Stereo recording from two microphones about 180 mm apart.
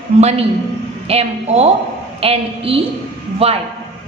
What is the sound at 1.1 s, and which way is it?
A woman's voice, 35° right (ahead or behind).